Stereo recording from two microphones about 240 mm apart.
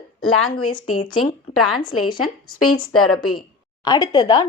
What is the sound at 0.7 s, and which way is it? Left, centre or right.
Speech, left.